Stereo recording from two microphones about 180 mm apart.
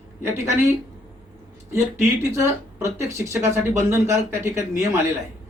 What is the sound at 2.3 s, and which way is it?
Speech, 15° right (ahead or behind).